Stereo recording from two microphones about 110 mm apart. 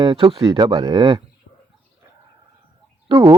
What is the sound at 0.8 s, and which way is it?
Speech, 45° right (ahead or behind).